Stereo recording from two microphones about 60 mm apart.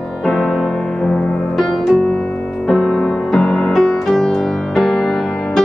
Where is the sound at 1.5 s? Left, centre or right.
Centre.